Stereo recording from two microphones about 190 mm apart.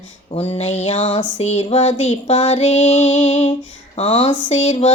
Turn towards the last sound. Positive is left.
turn(degrees=35)  # may be behind; listen again after turning